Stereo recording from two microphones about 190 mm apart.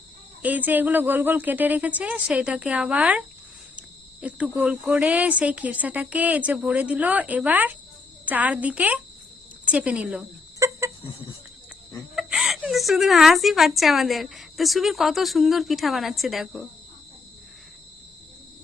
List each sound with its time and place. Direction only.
0.4 s cricket: 10° right (ahead or behind)
10.6 s chicken: 15° right (ahead or behind)
12.1 s a woman's voice: centre (ahead or behind)